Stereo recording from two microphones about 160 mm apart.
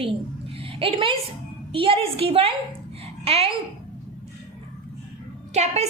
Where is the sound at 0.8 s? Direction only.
35° right (ahead or behind).